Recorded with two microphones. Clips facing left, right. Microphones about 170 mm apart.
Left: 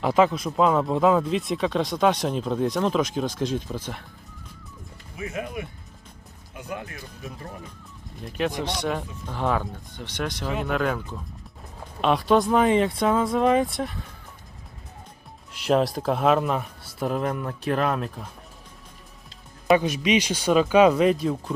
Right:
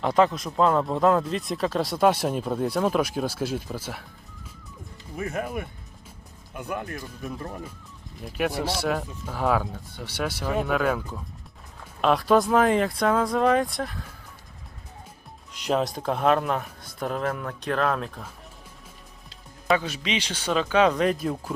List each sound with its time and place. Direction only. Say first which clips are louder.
0.0 s speech: left 1 dB; centre (ahead or behind)
5.1 s speech: right 2 dB; 50° right (ahead or behind)
8.4 s speech: even; 10° right (ahead or behind)
15.5 s speech: left 3 dB; centre (ahead or behind)
19.7 s speech: left 5 dB; 15° left (ahead or behind); by 21.5 s centre (ahead or behind)